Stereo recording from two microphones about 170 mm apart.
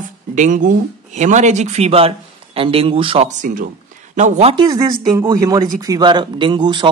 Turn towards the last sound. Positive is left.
turn(degrees=-25)  # may be behind; listen again after turning